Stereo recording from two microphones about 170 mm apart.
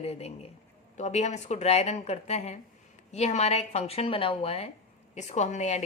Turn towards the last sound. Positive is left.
turn(degrees=40)  # may be behind; listen again after turning